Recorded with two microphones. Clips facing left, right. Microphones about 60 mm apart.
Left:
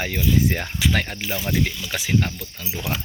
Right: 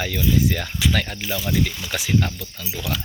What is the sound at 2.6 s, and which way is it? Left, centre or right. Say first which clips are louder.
Speech: even; left.